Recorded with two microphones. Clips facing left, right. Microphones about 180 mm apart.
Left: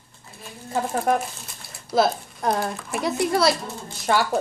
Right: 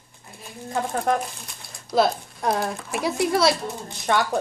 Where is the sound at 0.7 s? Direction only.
5° left (ahead or behind).